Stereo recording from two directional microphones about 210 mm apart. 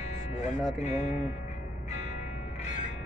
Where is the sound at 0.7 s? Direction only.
35° left (ahead or behind).